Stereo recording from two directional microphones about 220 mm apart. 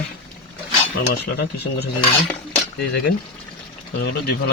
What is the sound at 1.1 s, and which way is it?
Speech, 50° left (ahead or behind).